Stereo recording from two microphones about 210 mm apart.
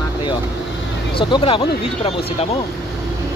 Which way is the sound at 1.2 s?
25° left (ahead or behind).